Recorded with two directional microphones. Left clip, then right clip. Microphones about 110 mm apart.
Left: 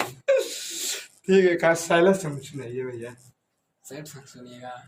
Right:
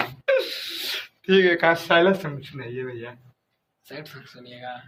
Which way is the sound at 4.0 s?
55° left (ahead or behind).